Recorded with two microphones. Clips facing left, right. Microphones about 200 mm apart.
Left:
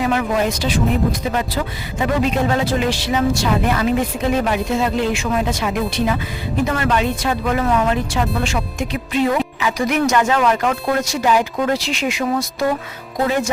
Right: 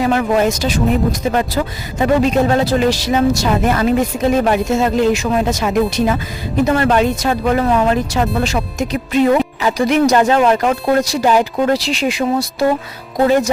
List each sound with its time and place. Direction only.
0.0 s a woman's voice: 40° right (ahead or behind)